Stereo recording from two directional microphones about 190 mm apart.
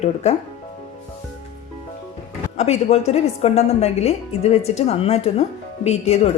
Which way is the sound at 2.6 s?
35° left (ahead or behind).